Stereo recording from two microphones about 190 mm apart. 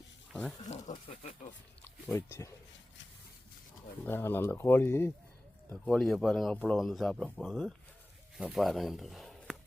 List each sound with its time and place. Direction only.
1.8 s speech: 10° left (ahead or behind)
4.0 s speech: 10° left (ahead or behind)